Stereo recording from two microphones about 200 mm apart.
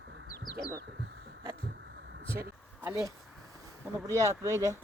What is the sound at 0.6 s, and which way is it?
Chicken, 15° left (ahead or behind).